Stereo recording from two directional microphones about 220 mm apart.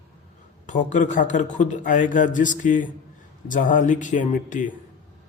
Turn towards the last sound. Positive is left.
turn(degrees=35)  # may be behind; listen again after turning